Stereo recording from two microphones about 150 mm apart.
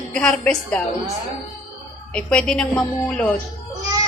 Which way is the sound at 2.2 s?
5° left (ahead or behind).